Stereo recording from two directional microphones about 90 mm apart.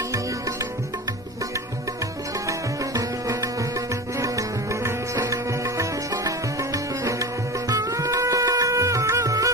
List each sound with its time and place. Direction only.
0.1 s music: 40° right (ahead or behind)
2.5 s music: 40° right (ahead or behind)